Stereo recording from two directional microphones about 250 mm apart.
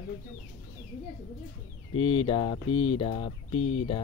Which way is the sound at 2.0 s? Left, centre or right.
Left.